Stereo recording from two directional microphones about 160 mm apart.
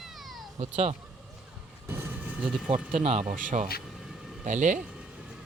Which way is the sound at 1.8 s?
15° right (ahead or behind).